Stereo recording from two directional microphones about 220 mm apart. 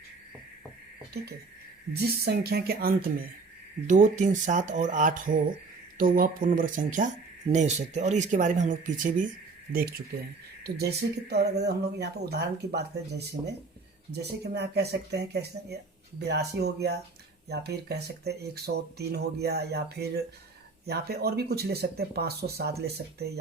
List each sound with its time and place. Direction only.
1.2 s speech: 45° right (ahead or behind)
10.6 s speech: 45° right (ahead or behind)